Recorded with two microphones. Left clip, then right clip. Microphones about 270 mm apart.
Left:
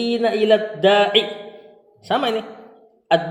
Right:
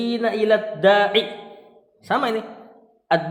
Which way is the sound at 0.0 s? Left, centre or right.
Right.